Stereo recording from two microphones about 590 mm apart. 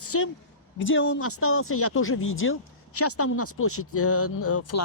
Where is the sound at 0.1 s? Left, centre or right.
Left.